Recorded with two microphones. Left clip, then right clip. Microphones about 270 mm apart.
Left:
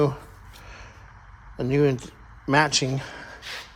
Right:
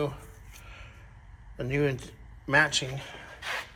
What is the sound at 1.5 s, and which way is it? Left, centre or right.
Speech, centre.